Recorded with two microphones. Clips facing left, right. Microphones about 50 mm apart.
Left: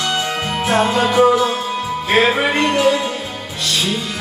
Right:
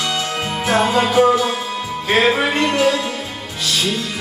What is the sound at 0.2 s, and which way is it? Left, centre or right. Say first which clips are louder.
Music: left 2 dB; centre.